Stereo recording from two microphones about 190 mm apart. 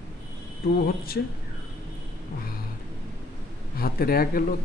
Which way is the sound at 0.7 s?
50° left (ahead or behind).